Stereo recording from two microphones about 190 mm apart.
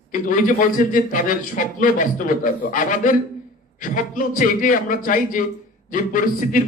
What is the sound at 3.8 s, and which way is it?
A man's voice, 45° left (ahead or behind).